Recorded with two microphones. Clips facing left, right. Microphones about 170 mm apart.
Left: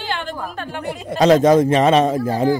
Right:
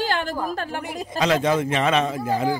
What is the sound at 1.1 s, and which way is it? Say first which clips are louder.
A man's voice: left 8 dB; 40° left (ahead or behind).